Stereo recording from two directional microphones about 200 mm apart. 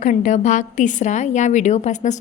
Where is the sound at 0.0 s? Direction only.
40° left (ahead or behind).